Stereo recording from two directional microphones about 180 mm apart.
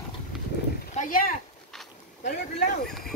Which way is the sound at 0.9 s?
50° left (ahead or behind).